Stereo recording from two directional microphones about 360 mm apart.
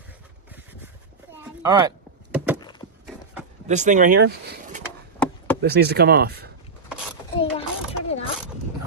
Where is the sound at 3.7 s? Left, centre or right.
Centre.